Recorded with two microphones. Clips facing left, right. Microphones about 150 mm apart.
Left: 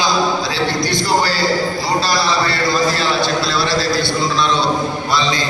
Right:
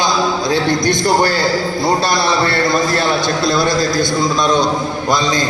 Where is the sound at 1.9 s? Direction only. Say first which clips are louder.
Right 4 dB; 55° right (ahead or behind).